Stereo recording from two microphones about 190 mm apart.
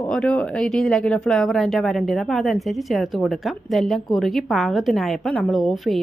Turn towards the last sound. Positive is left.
turn(degrees=0)  # may be behind; listen again after turning